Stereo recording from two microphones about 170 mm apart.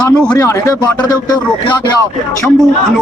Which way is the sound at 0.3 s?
20° left (ahead or behind).